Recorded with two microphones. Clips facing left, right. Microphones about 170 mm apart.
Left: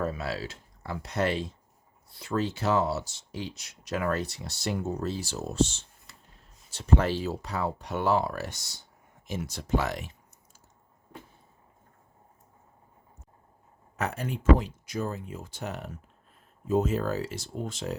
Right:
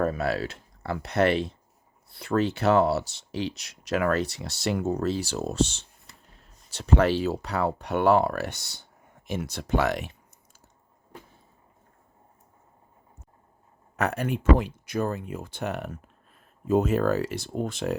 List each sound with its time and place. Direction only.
0.0 s speech: 55° right (ahead or behind)
13.9 s speech: 65° right (ahead or behind)